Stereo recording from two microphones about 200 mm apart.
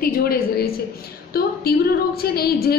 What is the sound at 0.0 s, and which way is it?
A woman's voice, 50° left (ahead or behind).